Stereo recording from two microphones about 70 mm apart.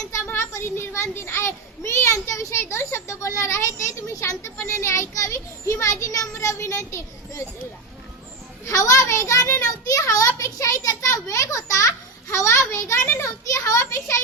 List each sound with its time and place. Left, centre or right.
0.3 s child singing: left
1.1 s a child's voice: left
8.6 s a child's voice: left
10.1 s a sound: left